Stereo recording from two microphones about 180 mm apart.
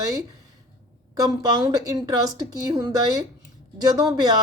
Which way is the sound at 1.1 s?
20° right (ahead or behind).